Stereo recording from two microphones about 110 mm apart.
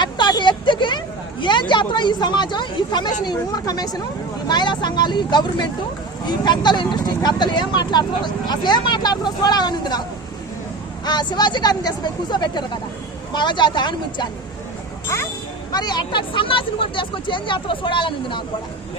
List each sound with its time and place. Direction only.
0.0 s vehicle: 45° left (ahead or behind)
4.4 s speech: 40° left (ahead or behind)
11.0 s speech: 40° left (ahead or behind)
15.0 s speech: 25° left (ahead or behind)
15.7 s speech: 40° left (ahead or behind)